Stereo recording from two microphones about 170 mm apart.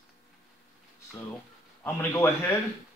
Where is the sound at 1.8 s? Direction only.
15° left (ahead or behind).